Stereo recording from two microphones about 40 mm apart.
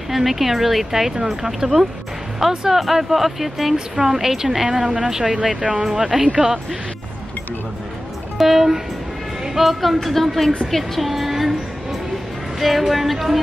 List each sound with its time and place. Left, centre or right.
0.1 s speech: centre
3.7 s speech: centre
5.6 s speech: right
8.4 s speech: centre
12.5 s speech: centre